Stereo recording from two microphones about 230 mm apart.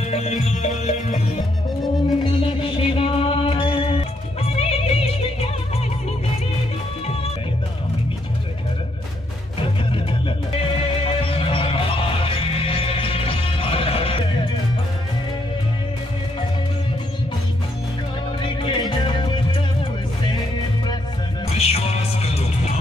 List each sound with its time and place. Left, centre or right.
0.1 s music: left
10.6 s music: left
18.4 s music: left
21.5 s music: left